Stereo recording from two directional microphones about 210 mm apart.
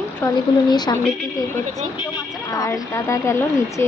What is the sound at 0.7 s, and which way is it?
A woman's voice, 20° left (ahead or behind).